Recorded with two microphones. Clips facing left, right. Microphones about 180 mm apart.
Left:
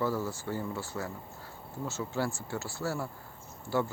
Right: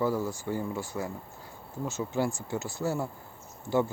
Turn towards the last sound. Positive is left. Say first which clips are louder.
# right 4 dB
turn(degrees=-20)  # may be behind; listen again after turning